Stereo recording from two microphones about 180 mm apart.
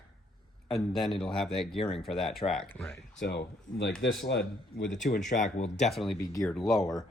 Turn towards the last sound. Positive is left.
turn(degrees=0)  # may be behind; listen again after turning